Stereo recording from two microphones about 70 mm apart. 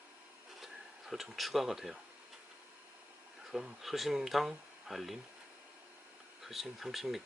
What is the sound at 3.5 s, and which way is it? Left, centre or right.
Speech, centre.